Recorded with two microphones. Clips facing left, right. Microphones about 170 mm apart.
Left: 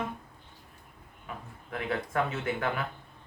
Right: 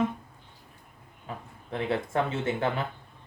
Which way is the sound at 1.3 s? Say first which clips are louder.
Right 3 dB; 30° right (ahead or behind).